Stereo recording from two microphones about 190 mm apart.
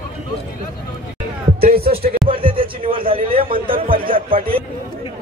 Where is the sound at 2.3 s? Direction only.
25° right (ahead or behind).